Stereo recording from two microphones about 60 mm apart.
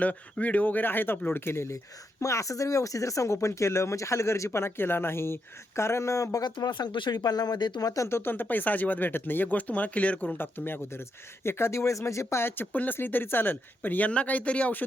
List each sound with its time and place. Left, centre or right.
0.0 s a woman's voice: left
2.2 s speech: left
7.3 s speech: left
8.1 s speech: left
12.7 s a woman's voice: left